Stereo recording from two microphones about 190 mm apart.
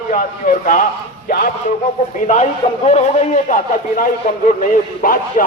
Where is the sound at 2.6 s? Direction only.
30° left (ahead or behind).